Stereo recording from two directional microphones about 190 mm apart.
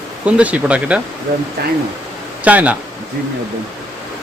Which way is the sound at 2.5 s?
5° right (ahead or behind).